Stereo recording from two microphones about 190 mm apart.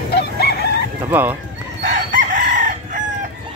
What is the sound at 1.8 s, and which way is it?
Chicken, 45° right (ahead or behind).